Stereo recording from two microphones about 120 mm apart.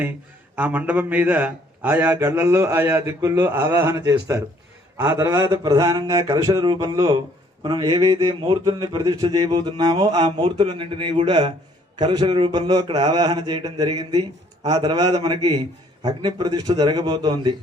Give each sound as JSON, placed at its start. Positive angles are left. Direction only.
{"t": 0.5, "sound": "a man's voice", "side_deg": -15}
{"t": 7.6, "sound": "a sound", "side_deg": -40}
{"t": 9.2, "sound": "a man's voice", "side_deg": -35}